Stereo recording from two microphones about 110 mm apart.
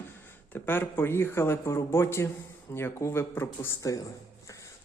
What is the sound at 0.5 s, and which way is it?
Speech, 20° left (ahead or behind).